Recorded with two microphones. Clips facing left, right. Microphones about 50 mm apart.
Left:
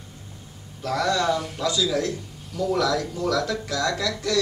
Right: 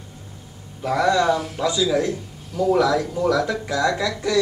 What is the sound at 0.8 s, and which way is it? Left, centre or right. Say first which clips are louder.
Speech: right 4 dB; centre.